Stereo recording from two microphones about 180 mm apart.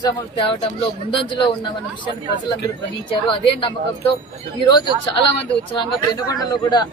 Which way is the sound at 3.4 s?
30° left (ahead or behind).